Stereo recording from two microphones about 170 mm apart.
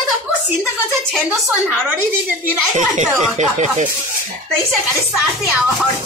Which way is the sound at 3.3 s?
45° right (ahead or behind).